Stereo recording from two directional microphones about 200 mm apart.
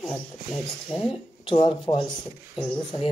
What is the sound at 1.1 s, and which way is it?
Speech, 25° left (ahead or behind).